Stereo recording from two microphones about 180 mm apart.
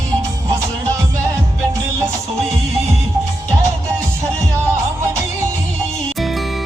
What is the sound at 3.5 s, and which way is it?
Music, 15° right (ahead or behind).